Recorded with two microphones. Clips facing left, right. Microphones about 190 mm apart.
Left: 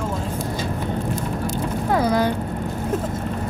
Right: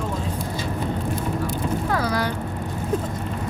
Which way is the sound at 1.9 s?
20° left (ahead or behind).